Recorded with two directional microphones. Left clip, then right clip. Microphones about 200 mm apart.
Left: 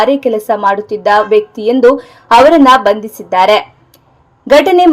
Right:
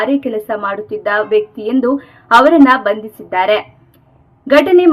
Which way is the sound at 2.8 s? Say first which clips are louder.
Left 5 dB; 15° left (ahead or behind).